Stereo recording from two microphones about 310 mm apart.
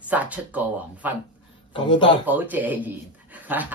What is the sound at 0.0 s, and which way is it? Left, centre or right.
Speech, centre.